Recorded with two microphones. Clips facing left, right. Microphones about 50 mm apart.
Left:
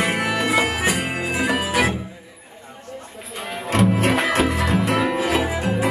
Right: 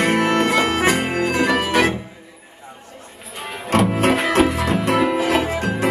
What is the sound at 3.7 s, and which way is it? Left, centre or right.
Music, centre.